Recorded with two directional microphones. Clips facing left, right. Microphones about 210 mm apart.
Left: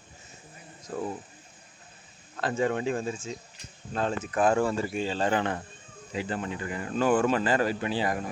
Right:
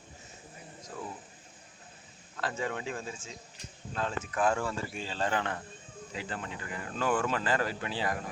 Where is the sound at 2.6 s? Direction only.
25° left (ahead or behind).